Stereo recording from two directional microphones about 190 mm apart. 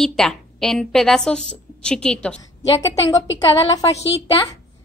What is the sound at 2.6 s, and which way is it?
A woman's voice, 20° left (ahead or behind).